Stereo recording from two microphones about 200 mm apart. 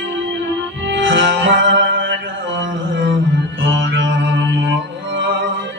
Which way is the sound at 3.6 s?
70° right (ahead or behind).